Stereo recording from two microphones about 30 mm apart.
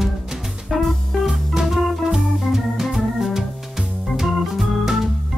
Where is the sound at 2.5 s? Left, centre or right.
Centre.